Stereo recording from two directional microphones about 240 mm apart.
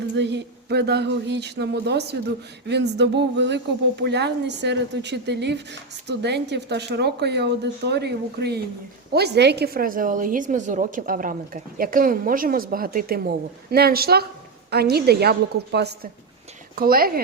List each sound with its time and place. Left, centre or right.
0.2 s a woman's voice: right